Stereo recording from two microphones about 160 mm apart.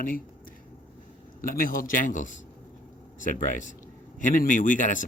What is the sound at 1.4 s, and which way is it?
Speech, 60° left (ahead or behind).